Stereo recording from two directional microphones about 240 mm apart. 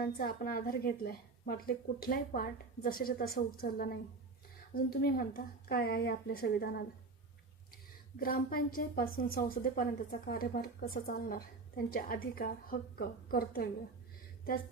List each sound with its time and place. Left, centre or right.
0.0 s a woman's voice: left
8.1 s a woman's voice: left